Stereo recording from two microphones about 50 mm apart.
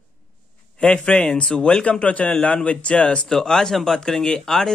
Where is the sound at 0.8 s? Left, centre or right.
Centre.